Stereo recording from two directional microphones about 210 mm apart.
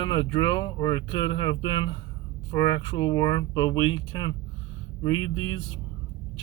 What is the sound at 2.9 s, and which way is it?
Speech, 20° left (ahead or behind).